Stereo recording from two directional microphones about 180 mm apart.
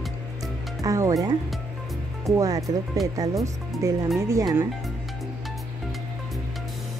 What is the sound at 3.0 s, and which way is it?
Speech, centre (ahead or behind).